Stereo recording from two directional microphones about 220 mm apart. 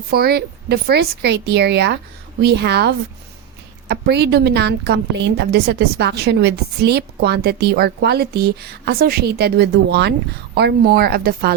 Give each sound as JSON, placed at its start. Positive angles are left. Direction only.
{"t": 0.1, "sound": "a woman's voice", "side_deg": -45}